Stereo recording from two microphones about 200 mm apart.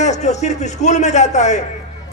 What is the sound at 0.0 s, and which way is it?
A man's voice, 35° left (ahead or behind).